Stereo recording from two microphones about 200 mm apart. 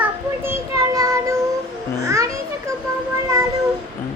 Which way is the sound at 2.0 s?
15° right (ahead or behind).